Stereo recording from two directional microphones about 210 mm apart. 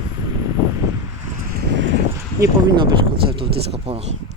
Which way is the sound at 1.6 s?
55° right (ahead or behind).